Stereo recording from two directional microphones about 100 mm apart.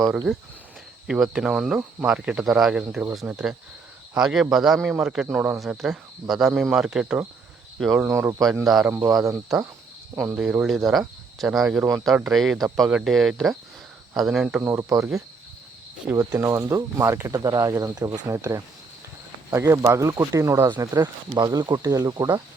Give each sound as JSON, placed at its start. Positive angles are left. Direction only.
{"t": 1.0, "sound": "speech", "side_deg": -5}
{"t": 7.8, "sound": "speech", "side_deg": 0}
{"t": 8.0, "sound": "speech", "side_deg": -30}
{"t": 8.9, "sound": "speech", "side_deg": -25}
{"t": 10.3, "sound": "speech", "side_deg": -10}
{"t": 14.6, "sound": "speech", "side_deg": -25}
{"t": 16.1, "sound": "speech", "side_deg": -20}
{"t": 16.4, "sound": "speech", "side_deg": -30}
{"t": 20.7, "sound": "speech", "side_deg": -45}